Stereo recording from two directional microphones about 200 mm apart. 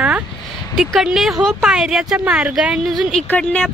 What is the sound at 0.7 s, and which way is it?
A woman's voice, centre (ahead or behind).